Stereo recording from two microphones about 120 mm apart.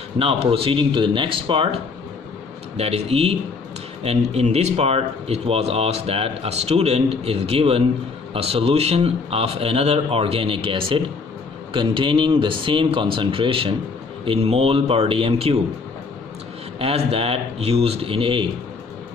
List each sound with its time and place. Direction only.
0.2 s speech: 50° right (ahead or behind)
2.8 s speech: 60° right (ahead or behind)
16.7 s speech: 55° right (ahead or behind)